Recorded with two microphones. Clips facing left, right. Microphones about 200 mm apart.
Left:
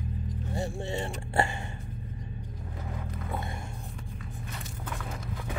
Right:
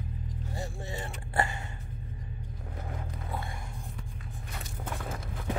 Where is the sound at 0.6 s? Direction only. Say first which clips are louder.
Left 7 dB; 30° left (ahead or behind).